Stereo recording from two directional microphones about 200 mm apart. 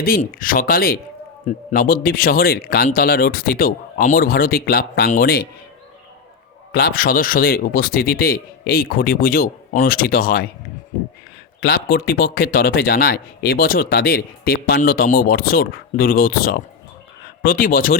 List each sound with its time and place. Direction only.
0.0 s speech: 45° left (ahead or behind)
6.7 s speech: 50° left (ahead or behind)
11.6 s speech: 50° left (ahead or behind)